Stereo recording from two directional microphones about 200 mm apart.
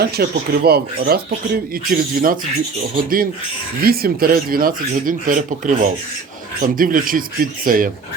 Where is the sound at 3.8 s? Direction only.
50° right (ahead or behind).